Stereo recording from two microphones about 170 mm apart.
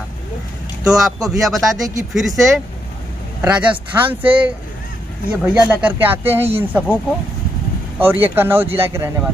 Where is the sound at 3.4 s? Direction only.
5° right (ahead or behind).